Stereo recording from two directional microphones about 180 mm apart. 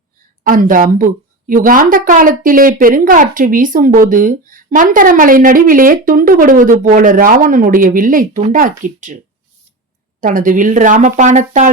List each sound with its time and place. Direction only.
0.4 s speech: 50° right (ahead or behind)
10.2 s speech: 45° right (ahead or behind)